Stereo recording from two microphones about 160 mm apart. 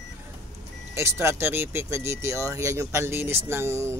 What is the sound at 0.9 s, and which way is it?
Speech, 15° right (ahead or behind).